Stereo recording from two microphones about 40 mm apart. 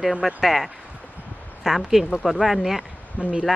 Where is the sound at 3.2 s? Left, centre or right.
Right.